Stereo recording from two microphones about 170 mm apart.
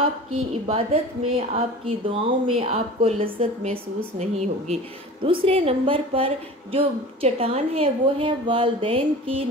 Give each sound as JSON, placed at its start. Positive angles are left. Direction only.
{"t": 0.7, "sound": "a woman's voice", "side_deg": -35}